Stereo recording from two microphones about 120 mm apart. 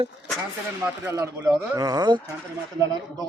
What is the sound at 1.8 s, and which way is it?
Speech, 35° right (ahead or behind).